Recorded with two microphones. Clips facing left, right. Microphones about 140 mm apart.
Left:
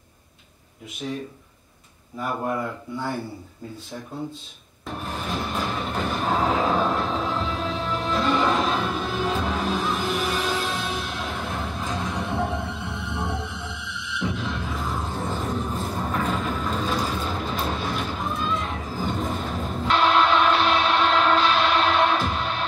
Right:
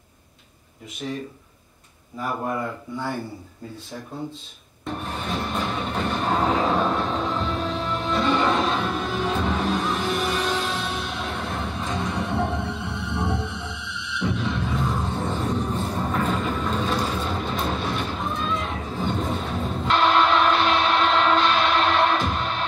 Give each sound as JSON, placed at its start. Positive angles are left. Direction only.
{"t": 1.0, "sound": "speech", "side_deg": 0}
{"t": 4.8, "sound": "music", "side_deg": 0}